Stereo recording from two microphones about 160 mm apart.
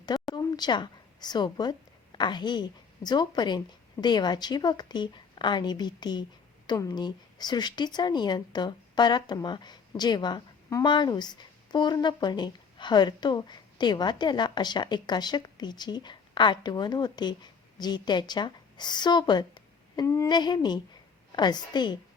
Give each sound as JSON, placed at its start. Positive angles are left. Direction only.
{"t": 0.3, "sound": "speech", "side_deg": 25}